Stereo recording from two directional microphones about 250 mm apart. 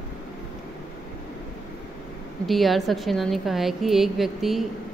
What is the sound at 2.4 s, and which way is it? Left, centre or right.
A woman's voice, centre.